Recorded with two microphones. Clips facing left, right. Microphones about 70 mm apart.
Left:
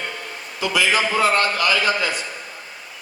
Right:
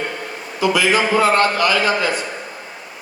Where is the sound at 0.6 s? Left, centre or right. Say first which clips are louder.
Right 4 dB; right.